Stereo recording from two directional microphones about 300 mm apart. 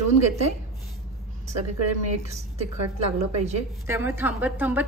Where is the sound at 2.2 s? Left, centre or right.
Right.